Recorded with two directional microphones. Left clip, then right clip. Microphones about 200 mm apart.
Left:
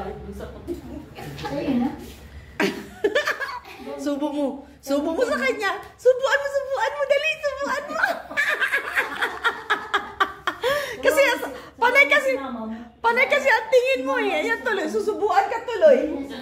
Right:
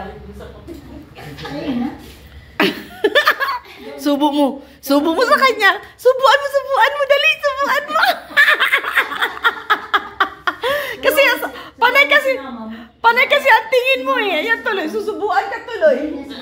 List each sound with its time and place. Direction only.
2.5 s chuckle: 30° right (ahead or behind)
9.2 s laughter: 15° right (ahead or behind)